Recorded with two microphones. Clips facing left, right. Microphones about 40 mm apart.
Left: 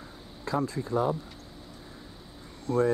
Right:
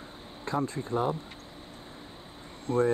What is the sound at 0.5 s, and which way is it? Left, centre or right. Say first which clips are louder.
Speech: left 1 dB; right.